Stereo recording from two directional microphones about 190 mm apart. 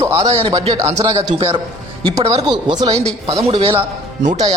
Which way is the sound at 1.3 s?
25° right (ahead or behind).